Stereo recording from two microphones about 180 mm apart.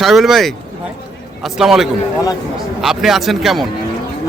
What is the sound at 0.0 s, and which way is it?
Speech, centre (ahead or behind).